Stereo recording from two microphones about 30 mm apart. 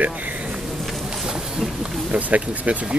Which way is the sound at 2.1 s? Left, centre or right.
Right.